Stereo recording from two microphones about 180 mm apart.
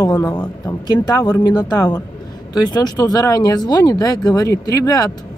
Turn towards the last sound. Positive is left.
turn(degrees=20)  # may be behind; listen again after turning